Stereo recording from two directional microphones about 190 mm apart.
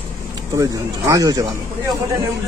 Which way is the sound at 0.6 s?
15° right (ahead or behind).